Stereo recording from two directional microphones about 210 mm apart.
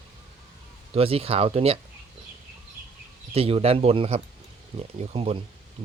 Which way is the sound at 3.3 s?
30° right (ahead or behind).